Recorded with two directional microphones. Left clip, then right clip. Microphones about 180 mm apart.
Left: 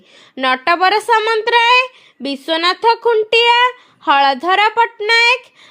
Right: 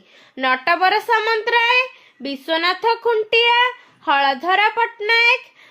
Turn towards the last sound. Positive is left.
turn(degrees=40)  # may be behind; listen again after turning